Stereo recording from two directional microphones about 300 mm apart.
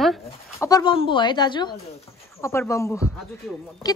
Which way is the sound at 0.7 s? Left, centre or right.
Centre.